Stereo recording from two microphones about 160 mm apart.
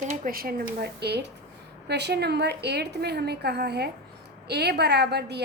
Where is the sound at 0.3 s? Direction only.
70° right (ahead or behind).